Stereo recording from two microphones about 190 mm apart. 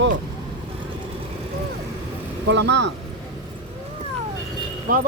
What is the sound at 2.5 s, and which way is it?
Speech, 65° right (ahead or behind).